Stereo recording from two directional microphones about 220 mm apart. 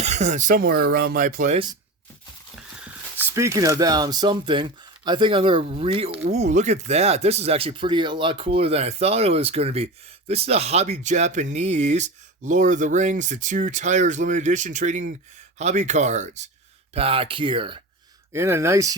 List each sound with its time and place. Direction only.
0.0 s speech: 30° right (ahead or behind)
2.6 s speech: 5° right (ahead or behind); by 17.7 s 25° right (ahead or behind)
18.3 s speech: 10° right (ahead or behind)